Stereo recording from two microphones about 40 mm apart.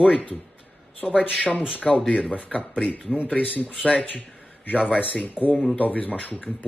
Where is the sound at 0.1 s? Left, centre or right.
Left.